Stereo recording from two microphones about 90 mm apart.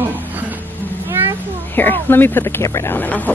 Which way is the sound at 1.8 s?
20° left (ahead or behind).